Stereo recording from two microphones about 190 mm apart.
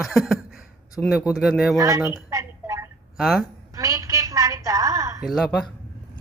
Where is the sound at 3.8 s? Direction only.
15° right (ahead or behind).